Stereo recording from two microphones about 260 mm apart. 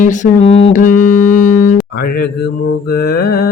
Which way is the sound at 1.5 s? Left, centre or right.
Left.